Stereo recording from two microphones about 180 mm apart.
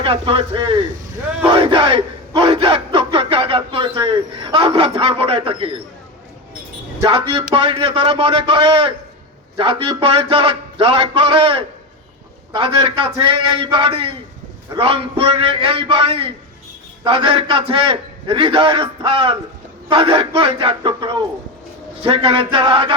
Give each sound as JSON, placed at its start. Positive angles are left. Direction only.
{"t": 0.0, "sound": "a man's voice", "side_deg": -30}
{"t": 1.5, "sound": "a sound", "side_deg": -30}
{"t": 7.0, "sound": "a man's voice", "side_deg": -30}
{"t": 12.5, "sound": "a man's voice", "side_deg": -30}